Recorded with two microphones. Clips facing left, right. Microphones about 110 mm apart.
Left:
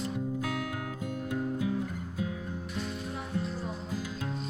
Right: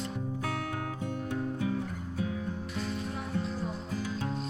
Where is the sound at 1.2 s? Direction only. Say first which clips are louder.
Left 2 dB; 15° left (ahead or behind).